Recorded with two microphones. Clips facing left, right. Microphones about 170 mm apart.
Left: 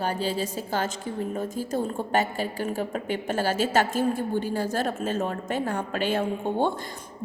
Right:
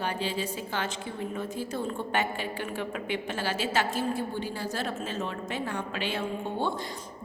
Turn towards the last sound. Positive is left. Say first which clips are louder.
# left 5 dB
turn(degrees=50)  # may be behind; listen again after turning